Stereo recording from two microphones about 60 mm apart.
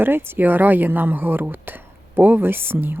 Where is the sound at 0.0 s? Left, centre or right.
Right.